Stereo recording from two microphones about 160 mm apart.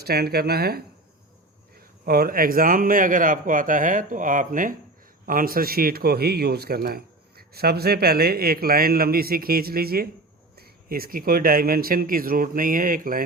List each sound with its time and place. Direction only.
0.0 s a man's voice: 80° right
2.0 s a man's voice: 70° right (ahead or behind)